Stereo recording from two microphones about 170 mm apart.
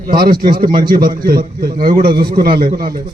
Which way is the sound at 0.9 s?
60° right (ahead or behind).